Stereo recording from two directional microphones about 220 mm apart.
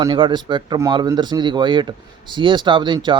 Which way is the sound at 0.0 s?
20° right (ahead or behind).